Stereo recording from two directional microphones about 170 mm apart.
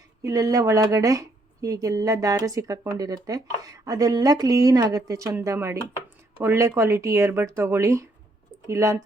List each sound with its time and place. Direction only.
0.2 s speech: 20° right (ahead or behind)